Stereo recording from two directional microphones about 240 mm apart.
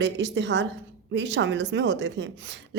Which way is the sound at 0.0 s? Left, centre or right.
Right.